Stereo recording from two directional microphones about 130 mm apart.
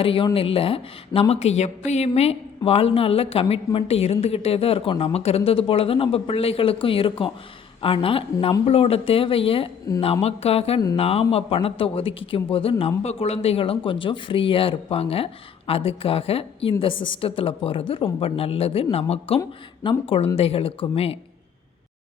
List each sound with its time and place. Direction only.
0.0 s speech: 45° left (ahead or behind)